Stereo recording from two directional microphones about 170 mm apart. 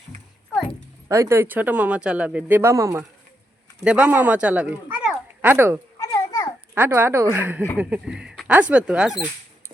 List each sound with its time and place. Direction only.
1.0 s speech: 15° right (ahead or behind)
6.0 s babbling: 20° left (ahead or behind)
6.7 s speech: 10° right (ahead or behind)